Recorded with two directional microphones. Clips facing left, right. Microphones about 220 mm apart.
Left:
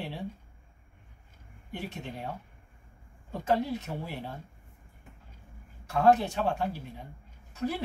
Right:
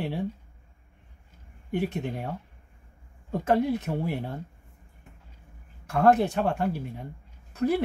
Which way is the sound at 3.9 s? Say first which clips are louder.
Right 7 dB; 50° right (ahead or behind).